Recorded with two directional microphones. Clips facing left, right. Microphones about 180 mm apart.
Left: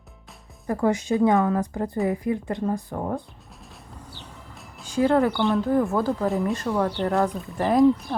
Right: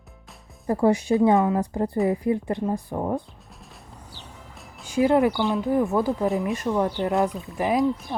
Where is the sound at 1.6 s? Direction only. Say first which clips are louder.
Right 2 dB; 30° right (ahead or behind).